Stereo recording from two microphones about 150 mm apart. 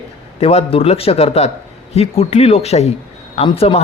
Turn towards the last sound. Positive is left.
turn(degrees=40)  # may be behind; listen again after turning